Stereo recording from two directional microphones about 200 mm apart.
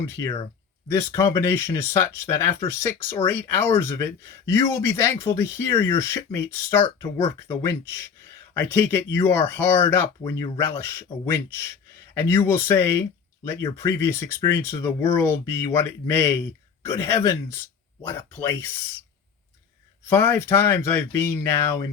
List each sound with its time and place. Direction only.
0.0 s speech: 15° left (ahead or behind)
3.2 s speech: 10° left (ahead or behind)
20.1 s speech: 10° left (ahead or behind)